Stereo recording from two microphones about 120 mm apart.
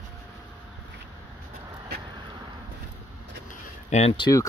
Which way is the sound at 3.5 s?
70° left (ahead or behind).